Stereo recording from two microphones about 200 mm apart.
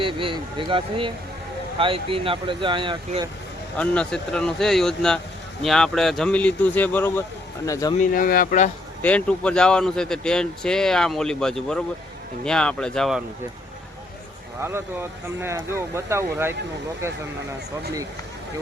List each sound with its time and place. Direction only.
0.0 s speech: 25° right (ahead or behind)
3.8 s speech: 5° left (ahead or behind)
8.1 s speech: 45° left (ahead or behind)
9.0 s speech: 5° left (ahead or behind)
14.6 s speech: 10° right (ahead or behind)